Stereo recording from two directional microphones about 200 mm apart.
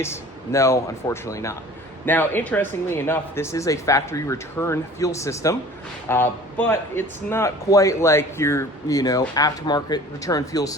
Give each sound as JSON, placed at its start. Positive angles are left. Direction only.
{"t": 0.0, "sound": "speech", "side_deg": 15}